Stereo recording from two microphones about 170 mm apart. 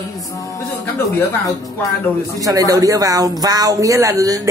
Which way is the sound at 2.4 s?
20° right (ahead or behind).